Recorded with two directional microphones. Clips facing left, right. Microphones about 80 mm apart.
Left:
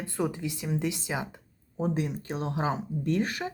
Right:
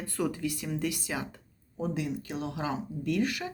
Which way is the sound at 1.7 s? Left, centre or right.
Left.